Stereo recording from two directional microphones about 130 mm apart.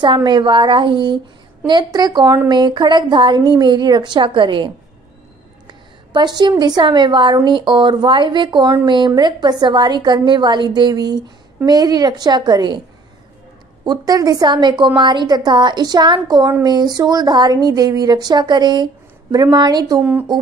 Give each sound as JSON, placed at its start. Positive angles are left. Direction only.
{"t": 0.0, "sound": "a woman's voice", "side_deg": -35}
{"t": 5.7, "sound": "a sound", "side_deg": -35}
{"t": 6.6, "sound": "a woman's voice", "side_deg": -35}
{"t": 13.8, "sound": "a woman's voice", "side_deg": -30}
{"t": 20.0, "sound": "speech", "side_deg": -15}